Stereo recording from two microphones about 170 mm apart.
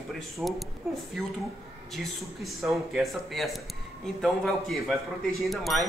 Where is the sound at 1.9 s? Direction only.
Centre (ahead or behind).